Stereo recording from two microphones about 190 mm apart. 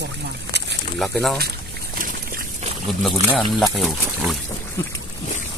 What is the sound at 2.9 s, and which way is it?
Speech, centre (ahead or behind).